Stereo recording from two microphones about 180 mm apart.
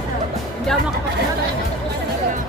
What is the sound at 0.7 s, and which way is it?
Music, 5° left (ahead or behind).